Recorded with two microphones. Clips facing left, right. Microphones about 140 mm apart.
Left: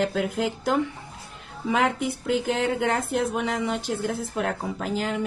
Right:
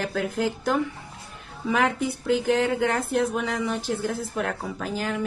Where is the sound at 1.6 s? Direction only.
25° left (ahead or behind).